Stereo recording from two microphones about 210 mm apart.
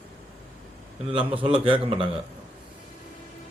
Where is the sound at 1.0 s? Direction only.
25° right (ahead or behind).